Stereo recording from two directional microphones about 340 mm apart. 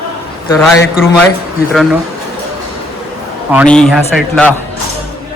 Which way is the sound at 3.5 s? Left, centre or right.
Centre.